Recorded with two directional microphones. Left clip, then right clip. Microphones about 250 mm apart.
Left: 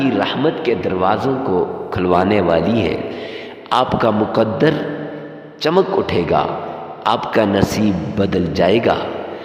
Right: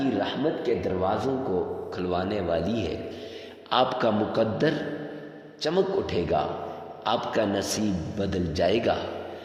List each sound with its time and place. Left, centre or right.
0.0 s a man's voice: left